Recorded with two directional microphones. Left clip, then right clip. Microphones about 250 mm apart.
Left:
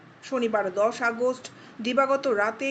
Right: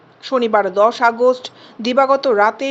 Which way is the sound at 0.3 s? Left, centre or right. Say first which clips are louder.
Right 10 dB; right.